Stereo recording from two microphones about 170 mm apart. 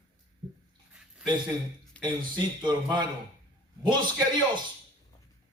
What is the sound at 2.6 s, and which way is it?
Speech, 25° right (ahead or behind).